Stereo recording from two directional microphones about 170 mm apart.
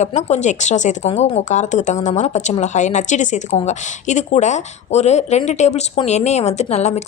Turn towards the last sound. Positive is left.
turn(degrees=40)  # may be behind; listen again after turning